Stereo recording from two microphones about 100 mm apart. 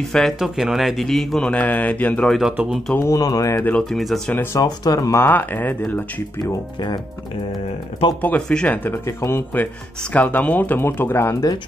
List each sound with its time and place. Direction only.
0.1 s a man's voice: centre (ahead or behind)
1.5 s speech: 15° left (ahead or behind)
2.5 s speech: 10° right (ahead or behind)
3.0 s speech: 40° left (ahead or behind)
3.9 s a man's voice: centre (ahead or behind)
4.6 s speech: 40° left (ahead or behind); by 6.2 s 20° left (ahead or behind)
6.4 s speech: 50° left (ahead or behind)
8.2 s speech: 15° left (ahead or behind)